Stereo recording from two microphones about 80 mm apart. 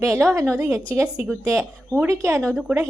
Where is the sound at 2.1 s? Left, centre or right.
Right.